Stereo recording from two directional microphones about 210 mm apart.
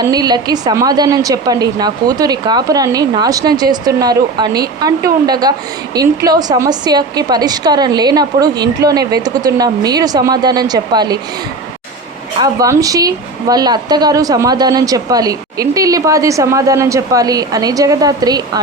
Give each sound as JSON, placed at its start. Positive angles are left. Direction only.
{"t": 0.1, "sound": "a woman's voice", "side_deg": -20}
{"t": 12.4, "sound": "speech", "side_deg": -15}